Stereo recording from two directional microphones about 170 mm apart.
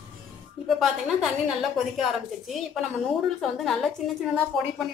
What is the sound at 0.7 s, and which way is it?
A woman's voice, centre (ahead or behind).